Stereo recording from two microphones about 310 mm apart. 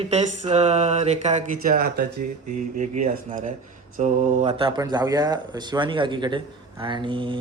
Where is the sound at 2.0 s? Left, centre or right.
Right.